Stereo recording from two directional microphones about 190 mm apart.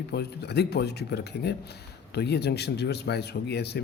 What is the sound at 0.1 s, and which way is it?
Speech, 60° left (ahead or behind).